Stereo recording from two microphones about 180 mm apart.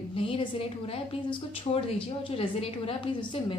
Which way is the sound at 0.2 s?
30° left (ahead or behind).